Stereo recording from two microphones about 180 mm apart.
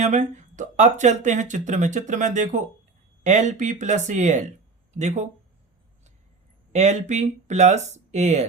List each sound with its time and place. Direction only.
0.0 s speech: 40° right (ahead or behind)
6.7 s speech: 40° right (ahead or behind)